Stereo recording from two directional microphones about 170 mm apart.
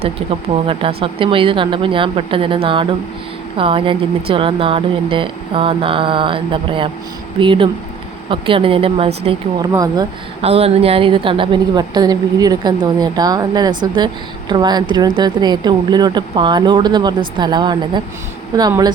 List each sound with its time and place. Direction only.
0.0 s speech: 35° right (ahead or behind)
9.6 s speech: 20° right (ahead or behind)
10.4 s speech: 35° right (ahead or behind)